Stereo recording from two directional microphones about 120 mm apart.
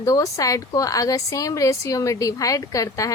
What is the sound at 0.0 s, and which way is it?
A woman's voice, 30° left (ahead or behind).